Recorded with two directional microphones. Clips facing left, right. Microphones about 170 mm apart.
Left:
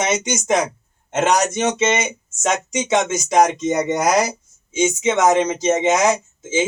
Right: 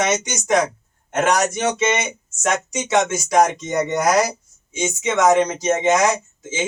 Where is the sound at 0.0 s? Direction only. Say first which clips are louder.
Even; 20° left (ahead or behind).